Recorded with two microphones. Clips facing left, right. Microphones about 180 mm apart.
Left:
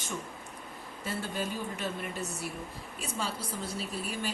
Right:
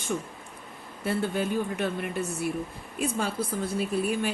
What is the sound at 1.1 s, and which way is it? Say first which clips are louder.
Speech: right 8 dB; 60° right (ahead or behind).